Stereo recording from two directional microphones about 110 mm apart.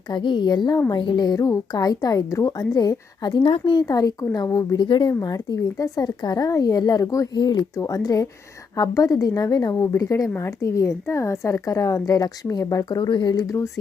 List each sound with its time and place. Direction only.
0.1 s a woman's voice: 45° left (ahead or behind)
3.4 s speech: 55° left (ahead or behind)
3.8 s a woman's voice: 35° left (ahead or behind)